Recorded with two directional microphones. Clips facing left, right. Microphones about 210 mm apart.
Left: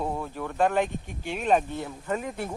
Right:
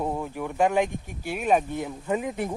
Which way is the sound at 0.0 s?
15° right (ahead or behind).